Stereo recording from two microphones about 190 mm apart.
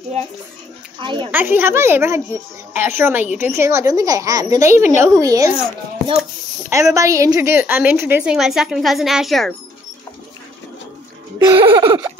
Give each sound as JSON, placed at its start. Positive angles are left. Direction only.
{"t": 1.0, "sound": "laughter", "side_deg": -25}
{"t": 1.3, "sound": "a woman's voice", "side_deg": -10}
{"t": 5.2, "sound": "laughter", "side_deg": -20}
{"t": 6.7, "sound": "a woman's voice", "side_deg": -15}
{"t": 11.3, "sound": "laughter", "side_deg": -25}